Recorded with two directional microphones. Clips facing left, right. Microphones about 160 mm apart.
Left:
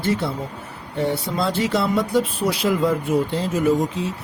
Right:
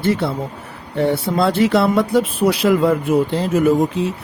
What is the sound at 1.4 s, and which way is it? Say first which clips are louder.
Speech: right 7 dB; 60° right (ahead or behind).